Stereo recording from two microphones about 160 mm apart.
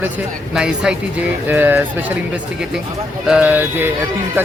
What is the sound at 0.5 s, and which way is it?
Speech, 5° right (ahead or behind).